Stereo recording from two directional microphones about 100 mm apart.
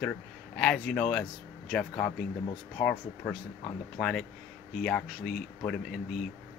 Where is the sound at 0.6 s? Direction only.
5° left (ahead or behind).